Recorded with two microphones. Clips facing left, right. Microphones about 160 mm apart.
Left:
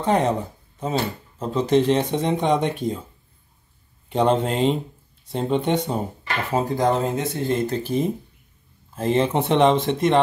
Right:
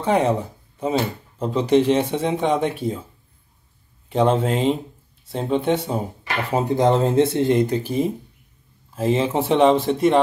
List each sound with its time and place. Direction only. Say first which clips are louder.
0.0 s speech: right 1 dB; 10° right (ahead or behind)
4.1 s speech: right 1 dB; centre (ahead or behind)
6.5 s speech: right 3 dB; 20° right (ahead or behind); by 10.2 s 5° right (ahead or behind)